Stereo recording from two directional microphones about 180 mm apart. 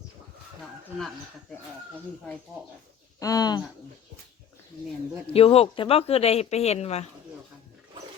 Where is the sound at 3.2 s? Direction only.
20° left (ahead or behind).